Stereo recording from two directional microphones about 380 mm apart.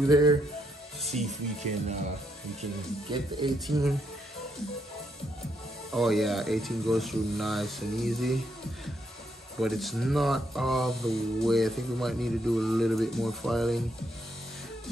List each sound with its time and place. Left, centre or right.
0.1 s speech: centre
3.1 s speech: centre
3.5 s speech: centre
5.9 s speech: centre
9.6 s speech: centre